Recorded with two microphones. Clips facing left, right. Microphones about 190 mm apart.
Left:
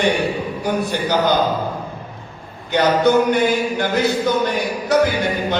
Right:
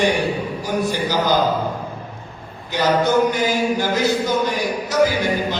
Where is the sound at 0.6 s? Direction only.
60° left (ahead or behind).